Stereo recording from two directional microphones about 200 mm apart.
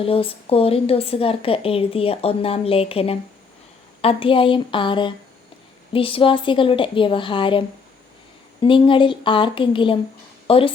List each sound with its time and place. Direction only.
0.0 s a woman's voice: 30° left (ahead or behind)
8.6 s a woman's voice: 25° left (ahead or behind)